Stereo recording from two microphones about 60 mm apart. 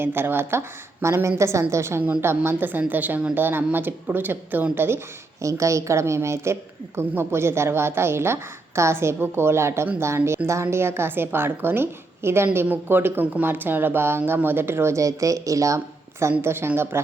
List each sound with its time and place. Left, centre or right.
0.0 s speech: right
1.0 s a woman's voice: right
5.4 s a woman's voice: right
12.6 s speech: right
16.4 s speech: right